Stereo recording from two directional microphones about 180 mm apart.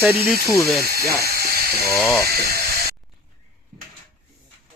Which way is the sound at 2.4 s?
60° right (ahead or behind).